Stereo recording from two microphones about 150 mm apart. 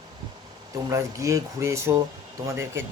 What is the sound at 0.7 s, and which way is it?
Speech, 20° right (ahead or behind).